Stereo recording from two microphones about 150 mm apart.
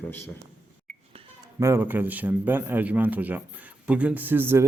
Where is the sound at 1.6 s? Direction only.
15° right (ahead or behind).